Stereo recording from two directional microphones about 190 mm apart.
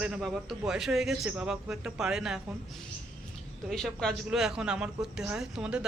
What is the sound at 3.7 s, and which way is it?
A man's voice, centre (ahead or behind).